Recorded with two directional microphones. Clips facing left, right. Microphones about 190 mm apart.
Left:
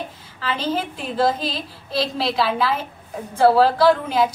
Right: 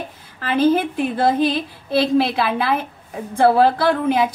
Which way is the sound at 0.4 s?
50° right (ahead or behind).